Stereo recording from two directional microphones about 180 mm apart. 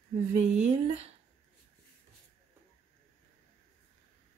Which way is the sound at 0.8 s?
35° right (ahead or behind).